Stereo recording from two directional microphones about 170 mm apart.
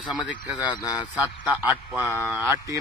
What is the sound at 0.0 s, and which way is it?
Speech, centre (ahead or behind).